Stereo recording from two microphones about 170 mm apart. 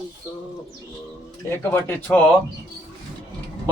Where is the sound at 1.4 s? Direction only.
10° left (ahead or behind).